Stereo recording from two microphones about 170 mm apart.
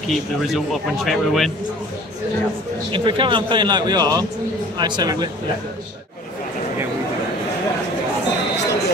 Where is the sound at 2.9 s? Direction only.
30° right (ahead or behind).